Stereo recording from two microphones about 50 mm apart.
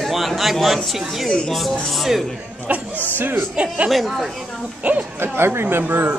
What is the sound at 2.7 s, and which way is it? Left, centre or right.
Speech, right.